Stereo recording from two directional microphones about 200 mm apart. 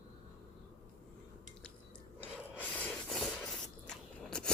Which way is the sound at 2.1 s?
10° left (ahead or behind).